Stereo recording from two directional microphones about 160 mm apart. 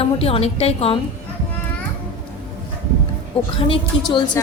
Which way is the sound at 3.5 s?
35° left (ahead or behind).